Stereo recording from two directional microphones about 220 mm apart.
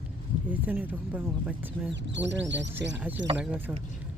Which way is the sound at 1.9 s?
55° right (ahead or behind).